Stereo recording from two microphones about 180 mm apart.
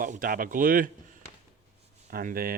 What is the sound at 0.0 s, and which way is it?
Speech, 50° right (ahead or behind).